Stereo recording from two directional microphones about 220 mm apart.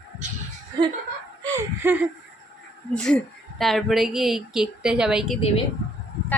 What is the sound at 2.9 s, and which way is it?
A woman's voice, 5° left (ahead or behind).